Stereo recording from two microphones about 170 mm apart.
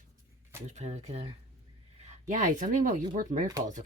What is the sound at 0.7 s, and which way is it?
Speech, 40° right (ahead or behind).